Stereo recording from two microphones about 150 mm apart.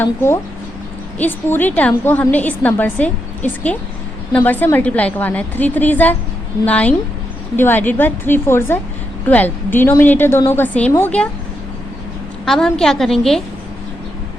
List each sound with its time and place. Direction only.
0.0 s a woman's voice: 15° left (ahead or behind)
12.5 s a woman's voice: 5° left (ahead or behind)